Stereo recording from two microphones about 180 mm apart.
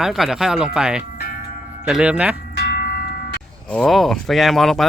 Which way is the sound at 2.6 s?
55° left (ahead or behind).